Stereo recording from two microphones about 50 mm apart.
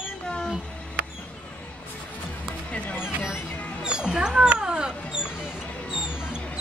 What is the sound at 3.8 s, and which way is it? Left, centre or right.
Speech, centre.